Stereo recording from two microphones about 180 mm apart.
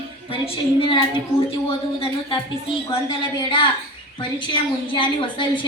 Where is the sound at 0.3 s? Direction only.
30° left (ahead or behind).